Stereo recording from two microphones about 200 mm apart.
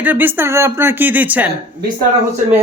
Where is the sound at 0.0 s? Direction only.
10° right (ahead or behind).